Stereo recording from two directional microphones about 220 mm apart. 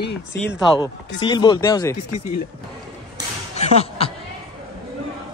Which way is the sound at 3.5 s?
30° left (ahead or behind).